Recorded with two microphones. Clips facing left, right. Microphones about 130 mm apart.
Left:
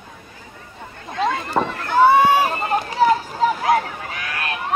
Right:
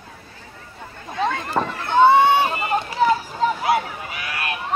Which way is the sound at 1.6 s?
Centre (ahead or behind).